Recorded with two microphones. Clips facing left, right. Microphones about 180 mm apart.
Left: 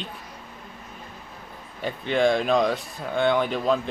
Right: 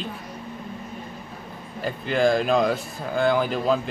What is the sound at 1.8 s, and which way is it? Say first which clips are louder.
Speech: even; centre (ahead or behind).